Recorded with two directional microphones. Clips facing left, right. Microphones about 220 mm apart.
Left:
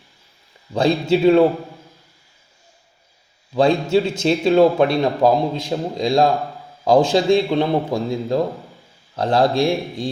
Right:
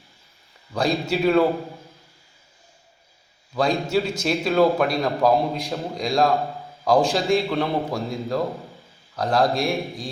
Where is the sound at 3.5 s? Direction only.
25° left (ahead or behind).